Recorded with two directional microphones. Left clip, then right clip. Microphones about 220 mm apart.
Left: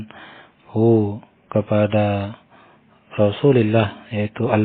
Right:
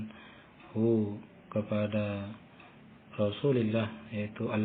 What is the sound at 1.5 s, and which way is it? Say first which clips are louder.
Speech: left 14 dB; 45° left (ahead or behind).